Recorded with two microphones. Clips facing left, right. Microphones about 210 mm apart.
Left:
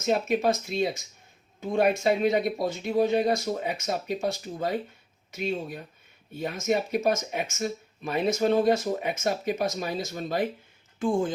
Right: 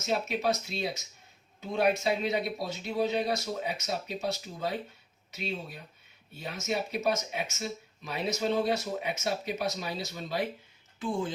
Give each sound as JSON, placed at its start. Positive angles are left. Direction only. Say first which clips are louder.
{"t": 0.0, "sound": "speech", "louder": "left 6 dB", "side_deg": 50}